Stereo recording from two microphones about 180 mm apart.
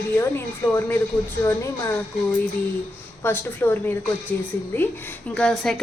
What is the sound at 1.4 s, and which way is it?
Speech, 15° left (ahead or behind).